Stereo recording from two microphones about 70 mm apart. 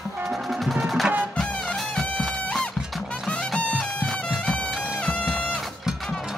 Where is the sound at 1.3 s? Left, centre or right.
Centre.